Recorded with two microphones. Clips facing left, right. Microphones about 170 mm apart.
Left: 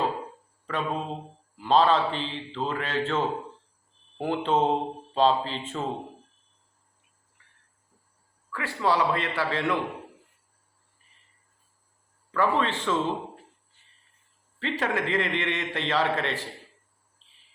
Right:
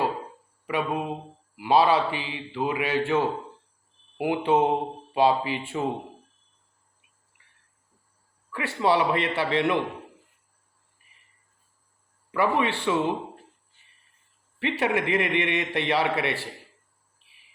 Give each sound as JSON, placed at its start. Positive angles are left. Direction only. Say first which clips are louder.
{"t": 0.7, "sound": "a man's voice", "louder": "right 3 dB", "side_deg": -15}
{"t": 8.8, "sound": "a man's voice", "louder": "right 2 dB", "side_deg": -20}
{"t": 12.3, "sound": "a man's voice", "louder": "right 1 dB", "side_deg": -15}
{"t": 14.6, "sound": "a man's voice", "louder": "right 3 dB", "side_deg": -15}
{"t": 17.2, "sound": "cricket", "louder": "right 1 dB", "side_deg": -15}